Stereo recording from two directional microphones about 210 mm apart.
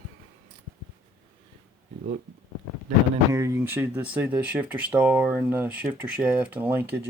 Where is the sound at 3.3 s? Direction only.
10° right (ahead or behind).